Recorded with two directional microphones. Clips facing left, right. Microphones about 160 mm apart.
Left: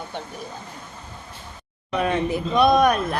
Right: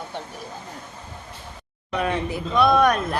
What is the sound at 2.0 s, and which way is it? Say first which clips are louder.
Speech: left 3 dB; 20° left (ahead or behind).